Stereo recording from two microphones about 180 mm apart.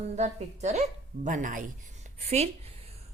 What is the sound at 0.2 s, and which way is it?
A woman's voice, 35° right (ahead or behind).